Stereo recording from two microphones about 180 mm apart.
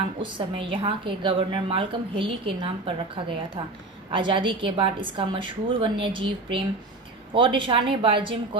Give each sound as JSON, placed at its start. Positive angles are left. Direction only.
{"t": 0.2, "sound": "a woman's voice", "side_deg": -25}
{"t": 4.1, "sound": "a woman's voice", "side_deg": -30}